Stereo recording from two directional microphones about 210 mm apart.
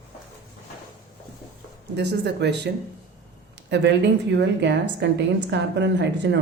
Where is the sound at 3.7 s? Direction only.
55° right (ahead or behind).